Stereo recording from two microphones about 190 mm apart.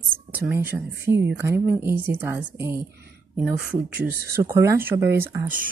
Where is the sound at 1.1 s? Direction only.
65° right (ahead or behind).